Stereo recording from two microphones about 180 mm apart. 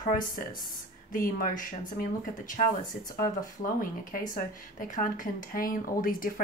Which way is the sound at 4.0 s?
50° left (ahead or behind).